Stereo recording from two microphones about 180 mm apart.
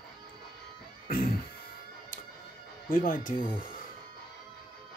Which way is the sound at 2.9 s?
50° left (ahead or behind).